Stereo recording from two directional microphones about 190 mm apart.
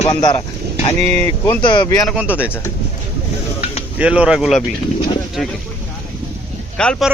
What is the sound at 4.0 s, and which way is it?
Speech, 5° right (ahead or behind).